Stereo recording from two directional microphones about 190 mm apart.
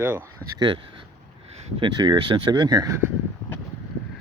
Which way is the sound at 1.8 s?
25° right (ahead or behind).